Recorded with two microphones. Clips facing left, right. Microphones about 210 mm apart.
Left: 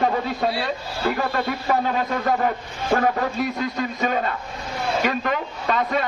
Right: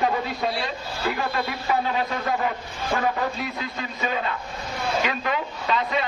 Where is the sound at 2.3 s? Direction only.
45° left (ahead or behind).